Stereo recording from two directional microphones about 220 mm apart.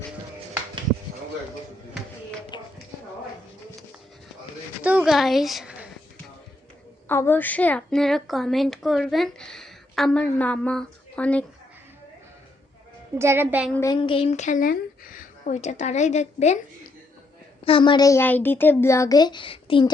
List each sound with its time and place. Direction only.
2.5 s a sound: 20° left (ahead or behind)
4.8 s a sound: 5° right (ahead or behind)
7.1 s a woman's voice: 10° left (ahead or behind)
13.1 s a woman's voice: 10° right (ahead or behind)
13.7 s a woman's voice: 20° left (ahead or behind)
17.7 s a woman's voice: 20° left (ahead or behind)